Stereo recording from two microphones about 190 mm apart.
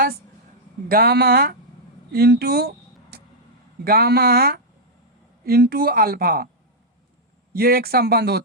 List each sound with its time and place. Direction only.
0.9 s speech: 50° right (ahead or behind)
7.5 s speech: 55° right (ahead or behind)